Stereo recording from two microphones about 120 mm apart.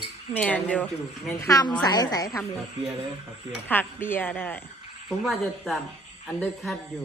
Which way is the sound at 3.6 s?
15° left (ahead or behind).